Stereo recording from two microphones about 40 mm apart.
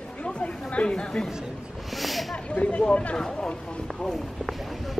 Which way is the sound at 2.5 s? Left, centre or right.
Left.